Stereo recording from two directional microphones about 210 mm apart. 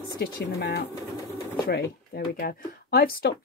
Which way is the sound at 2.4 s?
45° left (ahead or behind).